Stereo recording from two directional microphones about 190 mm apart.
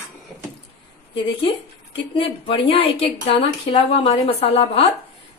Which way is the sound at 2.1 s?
25° left (ahead or behind).